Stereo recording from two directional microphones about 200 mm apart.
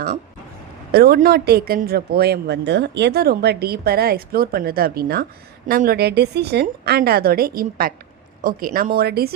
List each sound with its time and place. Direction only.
0.9 s a woman's voice: 50° right (ahead or behind)